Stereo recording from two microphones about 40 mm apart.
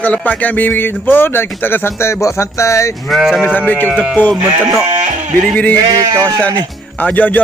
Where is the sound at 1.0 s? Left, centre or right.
Left.